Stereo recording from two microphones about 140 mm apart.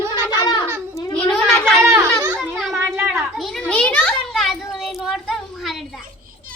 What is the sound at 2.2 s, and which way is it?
Children playing, 15° right (ahead or behind).